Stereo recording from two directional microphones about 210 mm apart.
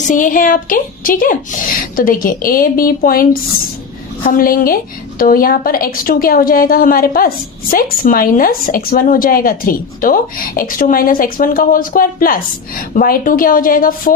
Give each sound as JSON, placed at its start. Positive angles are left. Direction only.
{"t": 0.1, "sound": "a woman's voice", "side_deg": 40}